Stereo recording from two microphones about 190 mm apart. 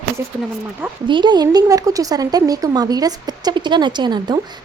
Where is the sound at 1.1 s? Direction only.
25° right (ahead or behind).